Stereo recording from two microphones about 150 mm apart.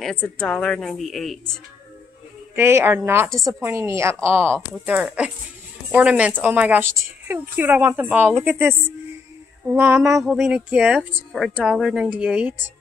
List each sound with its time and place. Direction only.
0.0 s speech: 5° left (ahead or behind)
2.5 s a woman's voice: 15° right (ahead or behind)
9.8 s a woman's voice: 15° right (ahead or behind)
10.1 s speech: centre (ahead or behind)